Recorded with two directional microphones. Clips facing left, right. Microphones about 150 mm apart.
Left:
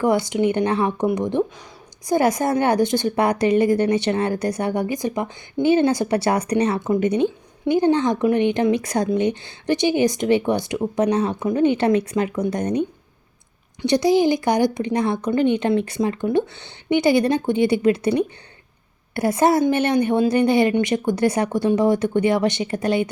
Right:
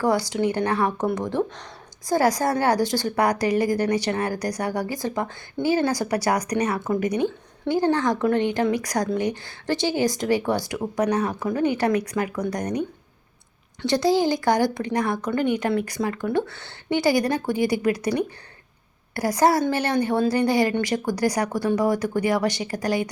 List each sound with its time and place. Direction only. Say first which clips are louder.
0.0 s speech: left 3 dB; 20° left (ahead or behind)
13.8 s speech: left 3 dB; 20° left (ahead or behind)